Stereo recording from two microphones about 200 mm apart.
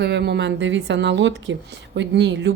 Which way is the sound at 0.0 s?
60° right (ahead or behind).